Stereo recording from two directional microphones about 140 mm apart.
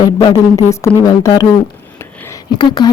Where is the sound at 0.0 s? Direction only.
30° left (ahead or behind).